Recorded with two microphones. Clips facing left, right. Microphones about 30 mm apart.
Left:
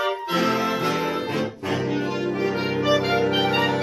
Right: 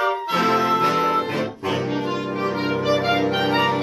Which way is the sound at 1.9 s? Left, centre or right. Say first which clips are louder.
Even; right.